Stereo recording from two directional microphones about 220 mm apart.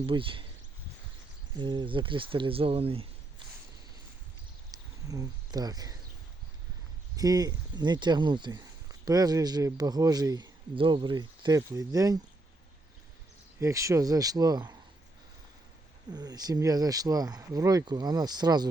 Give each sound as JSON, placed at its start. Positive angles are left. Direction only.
{"t": 0.0, "sound": "speech", "side_deg": -25}
{"t": 1.5, "sound": "speech", "side_deg": -20}
{"t": 4.7, "sound": "a sound", "side_deg": -15}
{"t": 7.2, "sound": "speech", "side_deg": -15}
{"t": 13.6, "sound": "speech", "side_deg": -15}
{"t": 16.1, "sound": "speech", "side_deg": -20}